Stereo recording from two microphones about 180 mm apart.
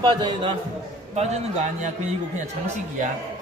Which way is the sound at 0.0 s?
25° right (ahead or behind).